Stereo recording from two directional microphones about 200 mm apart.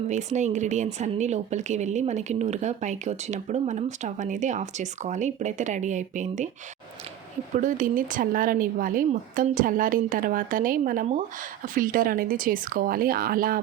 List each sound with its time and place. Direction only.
0.1 s speech: 35° right (ahead or behind)
7.5 s speech: 40° right (ahead or behind)